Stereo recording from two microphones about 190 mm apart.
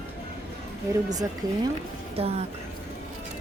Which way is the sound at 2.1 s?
30° right (ahead or behind).